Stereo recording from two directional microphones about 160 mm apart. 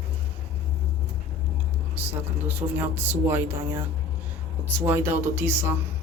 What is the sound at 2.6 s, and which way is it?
Speech, 30° right (ahead or behind).